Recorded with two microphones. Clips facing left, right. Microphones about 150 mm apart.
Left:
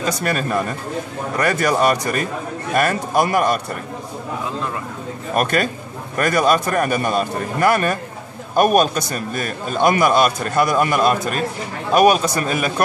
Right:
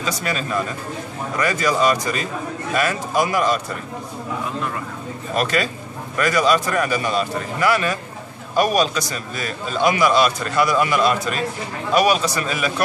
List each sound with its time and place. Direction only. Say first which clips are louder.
0.0 s a man's voice: left 4 dB; 55° left (ahead or behind)
5.3 s a man's voice: left 2 dB; 50° left (ahead or behind)